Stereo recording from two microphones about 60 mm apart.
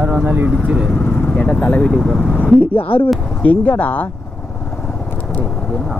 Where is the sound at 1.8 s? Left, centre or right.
Centre.